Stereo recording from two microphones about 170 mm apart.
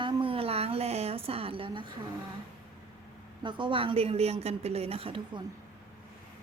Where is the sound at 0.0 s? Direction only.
30° right (ahead or behind).